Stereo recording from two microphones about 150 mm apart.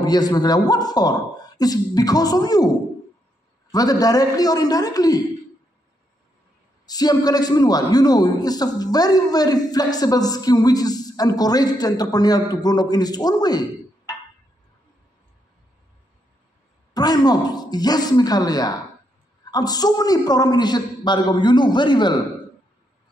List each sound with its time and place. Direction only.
0.0 s a man's voice: 25° left (ahead or behind)
3.7 s a man's voice: 25° left (ahead or behind)
6.9 s a man's voice: 25° left (ahead or behind)
16.9 s a man's voice: 25° left (ahead or behind)